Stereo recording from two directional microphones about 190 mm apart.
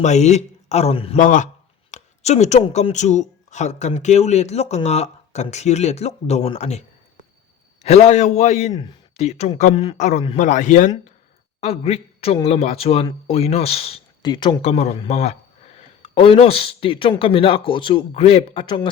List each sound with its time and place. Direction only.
0.0 s speech: 35° left (ahead or behind)
1.2 s a man's voice: 45° left (ahead or behind); by 18.9 s 25° left (ahead or behind)